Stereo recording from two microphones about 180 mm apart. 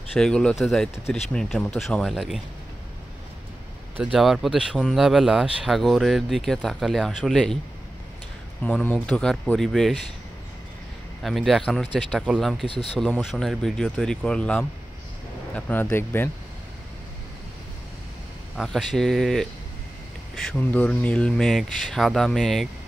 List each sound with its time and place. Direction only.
0.1 s speech: 5° left (ahead or behind)
4.0 s speech: 5° right (ahead or behind)
8.6 s speech: 5° left (ahead or behind)
11.2 s speech: centre (ahead or behind)
18.6 s speech: centre (ahead or behind)